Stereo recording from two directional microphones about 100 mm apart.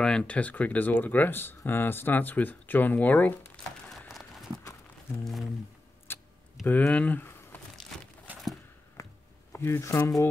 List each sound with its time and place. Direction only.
0.0 s speech: 10° left (ahead or behind)
4.1 s a sound: centre (ahead or behind)
6.1 s tick-tock: 20° left (ahead or behind)
6.6 s speech: 15° left (ahead or behind)
8.3 s a sound: 15° right (ahead or behind)
9.5 s speech: 25° left (ahead or behind)